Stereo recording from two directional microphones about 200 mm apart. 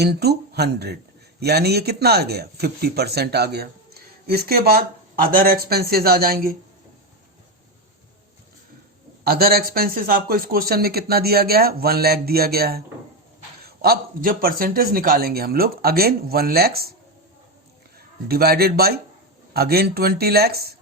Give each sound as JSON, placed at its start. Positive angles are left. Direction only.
{"t": 0.0, "sound": "a man's voice", "side_deg": -55}
{"t": 9.2, "sound": "a man's voice", "side_deg": -50}
{"t": 18.3, "sound": "a man's voice", "side_deg": -50}